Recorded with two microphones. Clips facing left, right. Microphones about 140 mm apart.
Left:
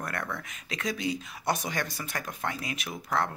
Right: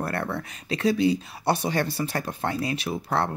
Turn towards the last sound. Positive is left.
turn(degrees=-30)  # may be behind; listen again after turning